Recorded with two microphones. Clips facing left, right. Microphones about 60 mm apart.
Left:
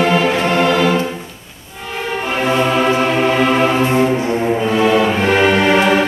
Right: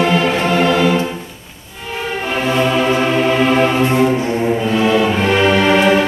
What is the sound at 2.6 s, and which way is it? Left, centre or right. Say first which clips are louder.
Music: right 1 dB; centre.